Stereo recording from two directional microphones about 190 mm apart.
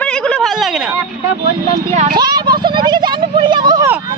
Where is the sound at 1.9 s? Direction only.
40° right (ahead or behind).